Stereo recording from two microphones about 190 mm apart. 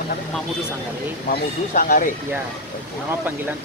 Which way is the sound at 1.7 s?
45° left (ahead or behind).